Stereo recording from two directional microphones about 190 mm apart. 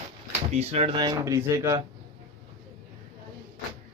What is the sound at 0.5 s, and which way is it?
Speech, 35° right (ahead or behind).